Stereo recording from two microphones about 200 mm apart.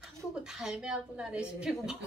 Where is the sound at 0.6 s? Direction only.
5° right (ahead or behind).